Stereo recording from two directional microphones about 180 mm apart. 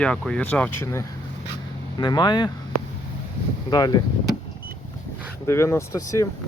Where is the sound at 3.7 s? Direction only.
20° left (ahead or behind).